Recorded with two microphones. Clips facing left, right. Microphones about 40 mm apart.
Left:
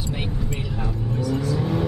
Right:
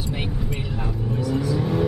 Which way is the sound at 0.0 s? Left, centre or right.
Centre.